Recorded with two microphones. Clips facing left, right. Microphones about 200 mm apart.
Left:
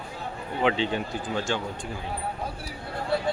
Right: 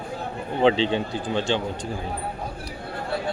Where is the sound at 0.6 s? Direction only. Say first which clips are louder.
Right 5 dB; 30° right (ahead or behind).